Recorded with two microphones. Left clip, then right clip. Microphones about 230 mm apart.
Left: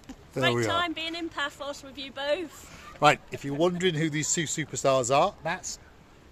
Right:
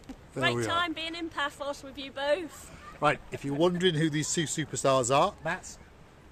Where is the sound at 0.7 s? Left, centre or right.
Centre.